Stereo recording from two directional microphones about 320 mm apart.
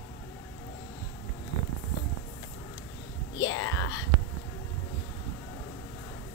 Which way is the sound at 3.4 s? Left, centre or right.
Left.